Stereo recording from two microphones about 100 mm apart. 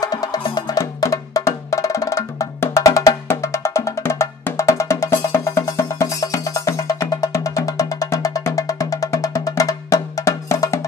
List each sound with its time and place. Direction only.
0.0 s music: 40° left (ahead or behind)